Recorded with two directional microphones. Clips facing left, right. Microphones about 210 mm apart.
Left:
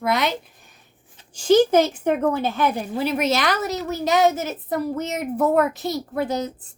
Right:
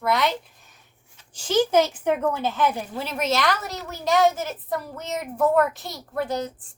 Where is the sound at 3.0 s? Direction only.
15° left (ahead or behind).